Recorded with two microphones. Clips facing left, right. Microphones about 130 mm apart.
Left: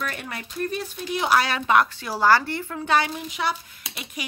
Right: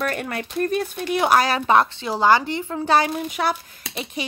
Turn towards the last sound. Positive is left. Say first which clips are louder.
# right 5 dB
turn(degrees=-30)  # may be behind; listen again after turning